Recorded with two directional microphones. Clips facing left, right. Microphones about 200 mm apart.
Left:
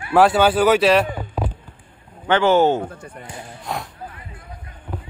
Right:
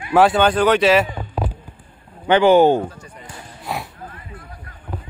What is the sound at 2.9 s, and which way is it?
Speech, 55° left (ahead or behind).